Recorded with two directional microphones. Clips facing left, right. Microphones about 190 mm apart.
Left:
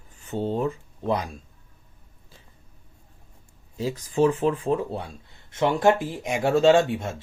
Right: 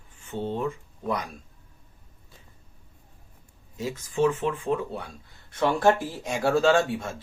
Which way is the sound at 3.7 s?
35° left (ahead or behind).